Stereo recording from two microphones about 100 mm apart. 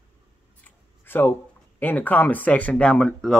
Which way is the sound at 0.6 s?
20° left (ahead or behind).